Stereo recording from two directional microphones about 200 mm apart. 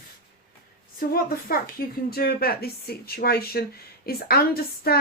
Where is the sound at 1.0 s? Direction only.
45° left (ahead or behind).